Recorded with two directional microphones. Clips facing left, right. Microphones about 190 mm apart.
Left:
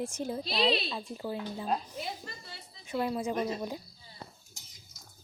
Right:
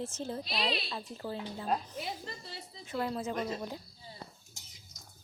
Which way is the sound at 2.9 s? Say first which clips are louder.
Left 3 dB; 15° left (ahead or behind).